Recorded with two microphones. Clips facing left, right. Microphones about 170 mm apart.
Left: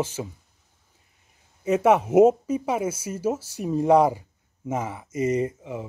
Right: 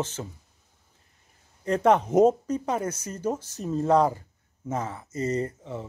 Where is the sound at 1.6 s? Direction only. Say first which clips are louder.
Left 2 dB; 5° left (ahead or behind).